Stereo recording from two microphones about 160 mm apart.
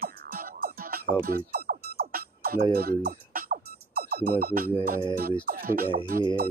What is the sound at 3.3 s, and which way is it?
Music, 70° right (ahead or behind).